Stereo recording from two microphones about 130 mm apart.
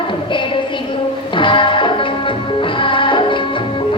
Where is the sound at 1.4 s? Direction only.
40° left (ahead or behind).